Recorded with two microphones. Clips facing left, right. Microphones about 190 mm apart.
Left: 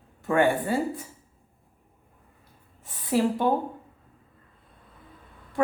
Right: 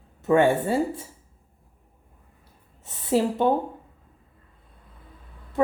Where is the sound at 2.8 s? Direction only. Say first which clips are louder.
Right 1 dB; 25° right (ahead or behind).